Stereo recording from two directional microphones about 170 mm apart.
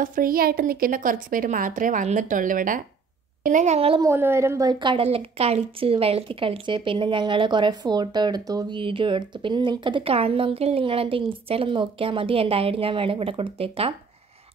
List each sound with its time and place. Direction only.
0.0 s a woman's voice: 55° right (ahead or behind); by 4.0 s 35° right (ahead or behind)
4.0 s a woman's voice: 15° right (ahead or behind); by 13.9 s 35° right (ahead or behind)